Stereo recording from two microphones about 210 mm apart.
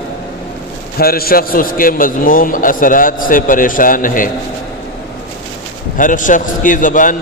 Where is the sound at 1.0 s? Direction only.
45° left (ahead or behind).